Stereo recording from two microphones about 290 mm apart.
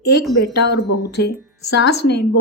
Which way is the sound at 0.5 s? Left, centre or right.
Left.